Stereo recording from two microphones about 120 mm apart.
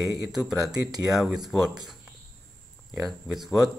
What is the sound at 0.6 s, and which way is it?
Speech, 35° right (ahead or behind).